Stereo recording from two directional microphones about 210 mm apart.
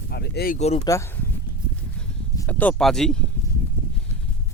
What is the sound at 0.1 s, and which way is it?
Speech, 50° left (ahead or behind).